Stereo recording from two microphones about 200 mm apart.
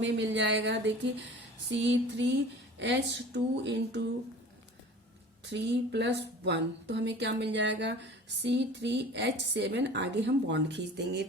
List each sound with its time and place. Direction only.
0.0 s a woman's voice: 65° right (ahead or behind)
5.5 s a woman's voice: 60° right (ahead or behind)